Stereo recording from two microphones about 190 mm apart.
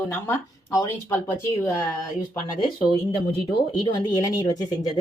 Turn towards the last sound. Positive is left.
turn(degrees=20)  # may be behind; listen again after turning